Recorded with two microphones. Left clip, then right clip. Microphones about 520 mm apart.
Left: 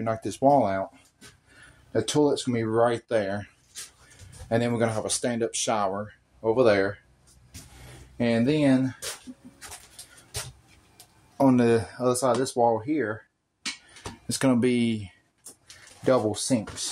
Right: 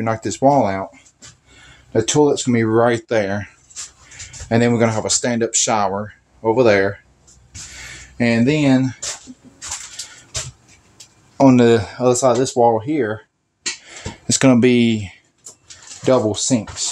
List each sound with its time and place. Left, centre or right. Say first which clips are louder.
0.0 s speech: right 7 dB; left
1.9 s speech: right 8 dB; left
4.5 s speech: right 9 dB; left
8.2 s speech: right 7 dB; left
11.3 s speech: right 9 dB; left
14.2 s speech: right 10 dB; left